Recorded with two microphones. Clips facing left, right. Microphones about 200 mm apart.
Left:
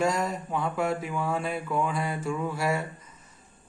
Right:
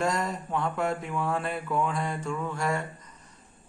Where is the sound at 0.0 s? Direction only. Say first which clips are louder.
Left 2 dB; centre (ahead or behind).